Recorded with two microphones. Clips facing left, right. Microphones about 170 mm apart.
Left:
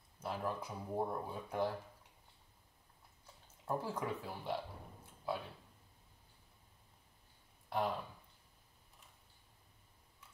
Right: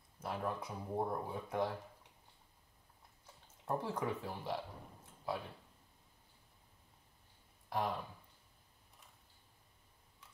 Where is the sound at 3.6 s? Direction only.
Centre (ahead or behind).